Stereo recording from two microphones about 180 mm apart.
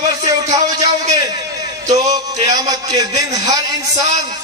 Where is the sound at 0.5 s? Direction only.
20° right (ahead or behind).